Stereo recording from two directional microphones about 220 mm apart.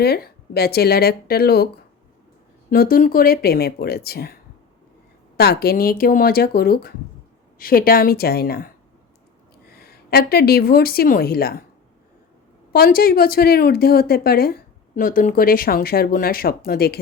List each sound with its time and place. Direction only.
0.0 s a woman's voice: 45° left (ahead or behind)
2.6 s a woman's voice: 40° left (ahead or behind)
5.4 s a woman's voice: 45° left (ahead or behind)
12.7 s a woman's voice: 40° left (ahead or behind)